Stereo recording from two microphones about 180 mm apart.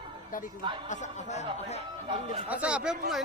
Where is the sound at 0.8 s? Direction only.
40° left (ahead or behind).